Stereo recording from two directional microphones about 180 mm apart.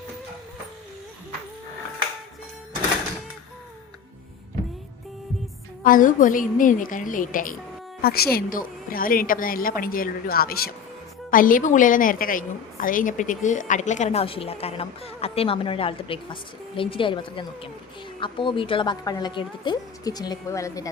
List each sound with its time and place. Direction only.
5.8 s a woman's voice: 50° left (ahead or behind)
8.0 s a woman's voice: 60° left (ahead or behind); by 20.9 s 20° left (ahead or behind)